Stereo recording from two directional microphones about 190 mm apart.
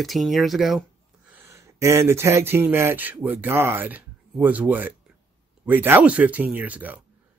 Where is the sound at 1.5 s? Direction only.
15° right (ahead or behind).